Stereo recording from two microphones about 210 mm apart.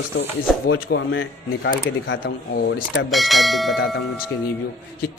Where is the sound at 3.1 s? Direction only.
Centre (ahead or behind).